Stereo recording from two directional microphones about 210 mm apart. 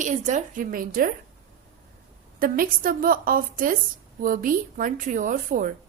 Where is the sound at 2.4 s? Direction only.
45° right (ahead or behind).